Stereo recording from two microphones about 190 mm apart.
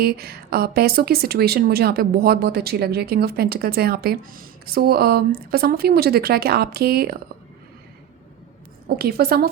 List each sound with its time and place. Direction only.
0.0 s a woman's voice: 55° right (ahead or behind)
9.0 s a woman's voice: 55° right (ahead or behind)